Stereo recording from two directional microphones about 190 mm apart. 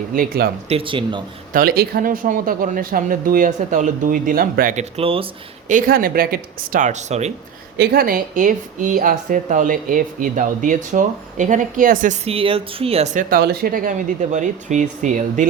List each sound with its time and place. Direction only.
0.1 s speech: 50° right (ahead or behind)
0.7 s speech: 25° right (ahead or behind)
1.5 s speech: 55° right (ahead or behind); by 5.7 s 30° right (ahead or behind)
5.7 s speech: 50° right (ahead or behind)
7.8 s speech: 55° right (ahead or behind); by 13.2 s 30° right (ahead or behind)
13.3 s speech: 55° right (ahead or behind)